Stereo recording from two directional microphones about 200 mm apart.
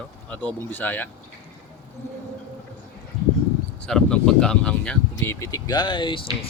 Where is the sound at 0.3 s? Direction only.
10° left (ahead or behind).